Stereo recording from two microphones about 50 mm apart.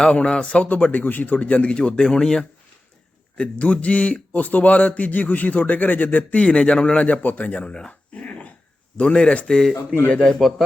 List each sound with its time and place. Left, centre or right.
0.0 s a man's voice: left
1.9 s speech: centre
3.3 s speech: left
6.4 s a man's voice: left
9.5 s speech: centre
10.1 s a man's voice: left